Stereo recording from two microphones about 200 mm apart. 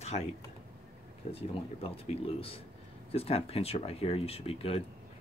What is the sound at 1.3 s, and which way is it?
Speech, 30° left (ahead or behind).